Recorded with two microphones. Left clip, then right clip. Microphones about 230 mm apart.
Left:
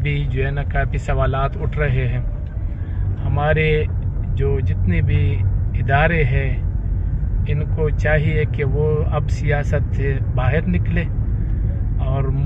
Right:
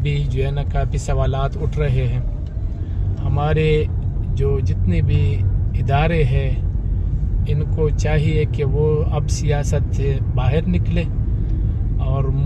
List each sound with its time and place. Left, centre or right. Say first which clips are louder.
0.0 s speech: left 1 dB; right
3.3 s speech: left 1 dB; right